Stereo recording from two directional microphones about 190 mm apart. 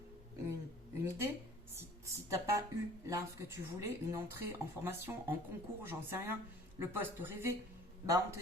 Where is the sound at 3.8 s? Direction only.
15° right (ahead or behind).